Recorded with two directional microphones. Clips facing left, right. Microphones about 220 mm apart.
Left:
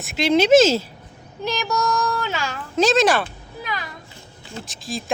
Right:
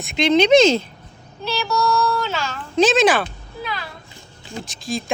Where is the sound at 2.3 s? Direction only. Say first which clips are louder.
Right 2 dB; 10° left (ahead or behind).